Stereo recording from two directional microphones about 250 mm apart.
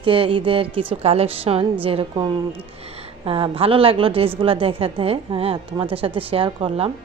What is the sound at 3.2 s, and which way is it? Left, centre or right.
A woman's voice, right.